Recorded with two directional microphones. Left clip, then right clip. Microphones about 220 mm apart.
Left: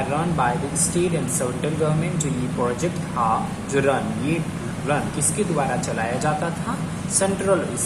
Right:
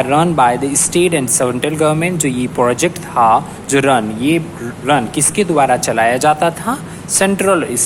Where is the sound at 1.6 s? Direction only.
45° right (ahead or behind).